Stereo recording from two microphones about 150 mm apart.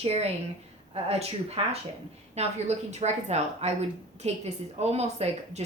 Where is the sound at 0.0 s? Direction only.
45° right (ahead or behind).